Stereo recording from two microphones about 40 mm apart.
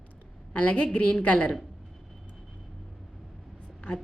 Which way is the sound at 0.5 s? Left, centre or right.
Left.